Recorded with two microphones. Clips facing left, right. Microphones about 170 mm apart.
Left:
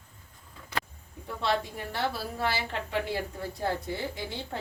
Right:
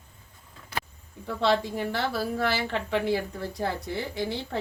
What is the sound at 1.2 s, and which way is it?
A woman's voice, 85° right.